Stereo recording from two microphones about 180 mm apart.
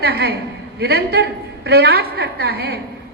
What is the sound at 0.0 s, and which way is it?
A woman's voice, 60° right (ahead or behind).